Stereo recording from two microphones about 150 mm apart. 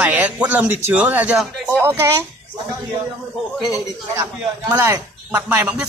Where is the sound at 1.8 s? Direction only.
15° right (ahead or behind).